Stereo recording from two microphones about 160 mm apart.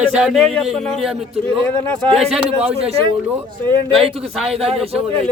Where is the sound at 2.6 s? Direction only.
35° right (ahead or behind).